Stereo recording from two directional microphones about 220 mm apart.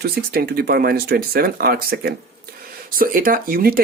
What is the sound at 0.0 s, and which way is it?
Speech, 45° right (ahead or behind).